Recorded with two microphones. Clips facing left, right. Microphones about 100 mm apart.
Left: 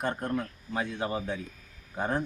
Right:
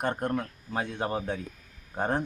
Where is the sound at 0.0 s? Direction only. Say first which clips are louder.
Right 2 dB; 50° right (ahead or behind).